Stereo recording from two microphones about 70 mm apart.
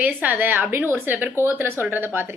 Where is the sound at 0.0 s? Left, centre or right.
Right.